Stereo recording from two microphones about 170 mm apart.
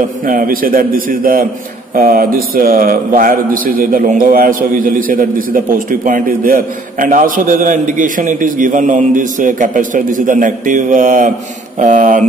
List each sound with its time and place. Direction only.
0.2 s a man's voice: 55° right (ahead or behind)